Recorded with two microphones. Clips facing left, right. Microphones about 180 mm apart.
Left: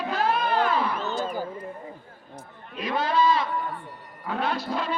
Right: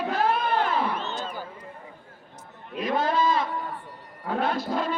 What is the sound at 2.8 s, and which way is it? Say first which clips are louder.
Sheep: left 1 dB; 50° right (ahead or behind).